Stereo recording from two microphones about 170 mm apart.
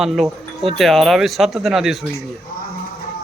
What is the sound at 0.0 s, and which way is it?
Speech, centre (ahead or behind).